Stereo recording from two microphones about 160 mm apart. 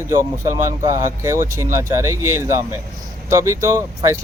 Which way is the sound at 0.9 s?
20° right (ahead or behind).